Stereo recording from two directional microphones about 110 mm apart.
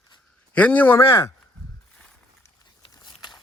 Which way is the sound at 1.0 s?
25° left (ahead or behind).